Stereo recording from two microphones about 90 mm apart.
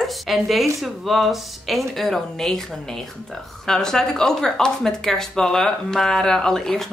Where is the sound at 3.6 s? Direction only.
5° left (ahead or behind).